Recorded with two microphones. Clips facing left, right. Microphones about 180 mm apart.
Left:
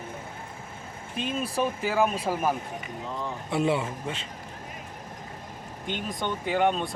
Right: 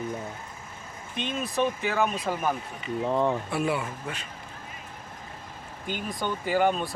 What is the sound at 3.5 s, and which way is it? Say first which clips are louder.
Speech: left 2 dB; 25° left (ahead or behind).